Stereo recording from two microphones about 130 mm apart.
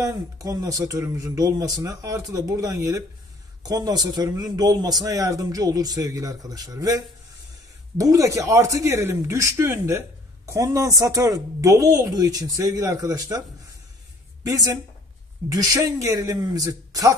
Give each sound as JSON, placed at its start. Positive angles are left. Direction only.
{"t": 0.0, "sound": "speech", "side_deg": -25}
{"t": 14.4, "sound": "a woman's voice", "side_deg": -25}